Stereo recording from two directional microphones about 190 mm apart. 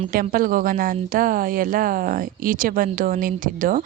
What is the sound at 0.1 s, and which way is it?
Speech, 50° right (ahead or behind).